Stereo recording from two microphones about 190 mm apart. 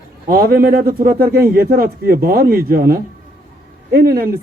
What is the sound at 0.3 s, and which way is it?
Speech, 50° right (ahead or behind).